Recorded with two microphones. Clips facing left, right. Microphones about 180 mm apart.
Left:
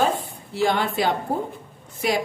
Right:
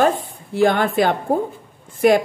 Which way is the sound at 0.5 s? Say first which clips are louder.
Right 6 dB; 50° right (ahead or behind).